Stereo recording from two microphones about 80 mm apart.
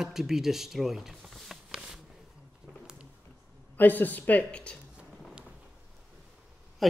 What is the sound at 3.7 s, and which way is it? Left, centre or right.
Speech, left.